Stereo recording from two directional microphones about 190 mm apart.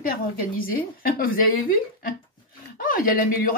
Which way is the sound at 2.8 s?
45° left (ahead or behind).